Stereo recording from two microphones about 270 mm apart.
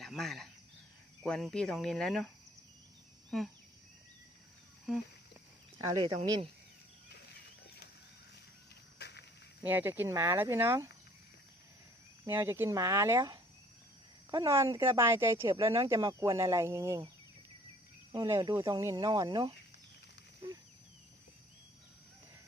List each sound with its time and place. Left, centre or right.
0.0 s speech: centre
4.9 s speech: centre
6.1 s speech: centre
9.0 s walk: left
9.6 s speech: centre
12.2 s speech: centre
18.1 s speech: centre